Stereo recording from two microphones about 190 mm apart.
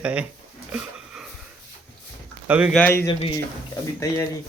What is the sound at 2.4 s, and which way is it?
Speech, 5° right (ahead or behind).